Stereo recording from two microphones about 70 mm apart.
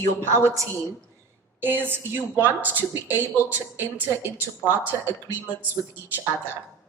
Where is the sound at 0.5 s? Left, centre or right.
Right.